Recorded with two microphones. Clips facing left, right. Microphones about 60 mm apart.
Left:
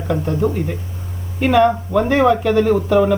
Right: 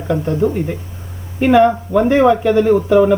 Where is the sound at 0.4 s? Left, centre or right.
Centre.